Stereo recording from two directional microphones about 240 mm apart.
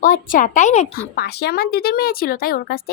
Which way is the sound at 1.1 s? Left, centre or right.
Left.